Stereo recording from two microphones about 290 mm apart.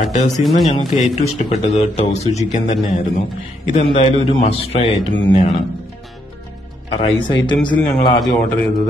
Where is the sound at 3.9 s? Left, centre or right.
Centre.